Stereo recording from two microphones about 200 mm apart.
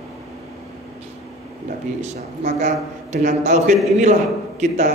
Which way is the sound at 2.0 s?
35° right (ahead or behind).